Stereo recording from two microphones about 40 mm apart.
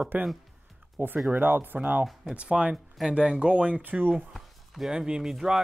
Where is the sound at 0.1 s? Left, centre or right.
Right.